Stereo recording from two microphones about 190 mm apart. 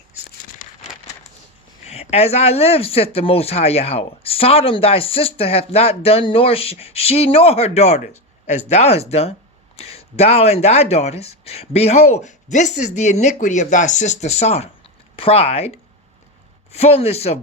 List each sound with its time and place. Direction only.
1.8 s speech: 35° left (ahead or behind)
16.7 s speech: 35° left (ahead or behind)